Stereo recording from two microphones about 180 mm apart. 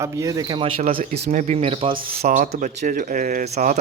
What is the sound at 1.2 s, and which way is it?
Speech, 50° right (ahead or behind).